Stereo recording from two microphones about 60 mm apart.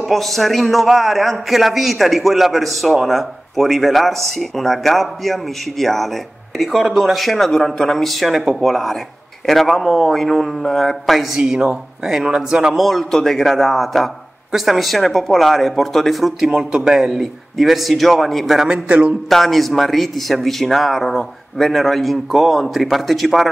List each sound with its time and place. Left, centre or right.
0.0 s a man's voice: centre
11.3 s speech: centre
12.8 s a man's voice: centre
18.7 s a man's voice: right
19.2 s a man's voice: centre